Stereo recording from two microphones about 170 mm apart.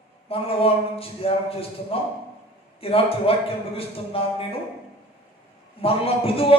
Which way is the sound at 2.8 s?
35° left (ahead or behind).